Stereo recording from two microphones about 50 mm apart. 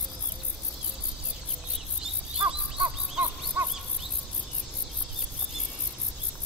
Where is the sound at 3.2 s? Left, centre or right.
Right.